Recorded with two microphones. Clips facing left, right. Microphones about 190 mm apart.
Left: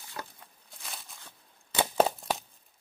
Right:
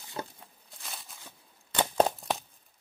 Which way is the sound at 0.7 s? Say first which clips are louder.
Even; centre (ahead or behind).